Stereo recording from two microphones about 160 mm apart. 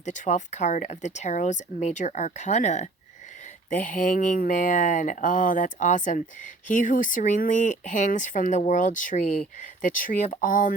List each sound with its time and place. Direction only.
0.0 s speech: 50° left (ahead or behind)